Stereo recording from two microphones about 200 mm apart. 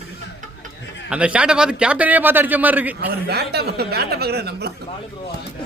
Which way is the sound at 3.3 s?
55° right (ahead or behind).